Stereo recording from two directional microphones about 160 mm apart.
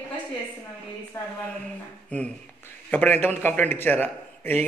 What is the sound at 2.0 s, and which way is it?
A man's voice, 10° left (ahead or behind).